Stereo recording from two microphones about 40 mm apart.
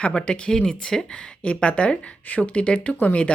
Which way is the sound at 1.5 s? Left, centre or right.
Left.